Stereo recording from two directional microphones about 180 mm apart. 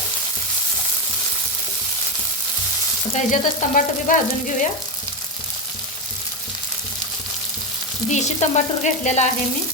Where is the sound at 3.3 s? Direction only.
45° left (ahead or behind).